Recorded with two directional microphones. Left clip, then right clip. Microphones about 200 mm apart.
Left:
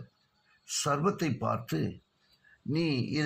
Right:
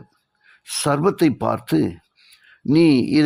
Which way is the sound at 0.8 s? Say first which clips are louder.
Right 11 dB; 50° right (ahead or behind).